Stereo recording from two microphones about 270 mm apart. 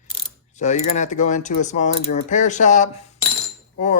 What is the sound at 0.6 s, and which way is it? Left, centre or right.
Speech, left.